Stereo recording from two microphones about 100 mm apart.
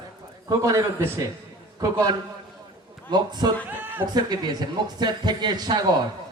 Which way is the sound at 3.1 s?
45° right (ahead or behind).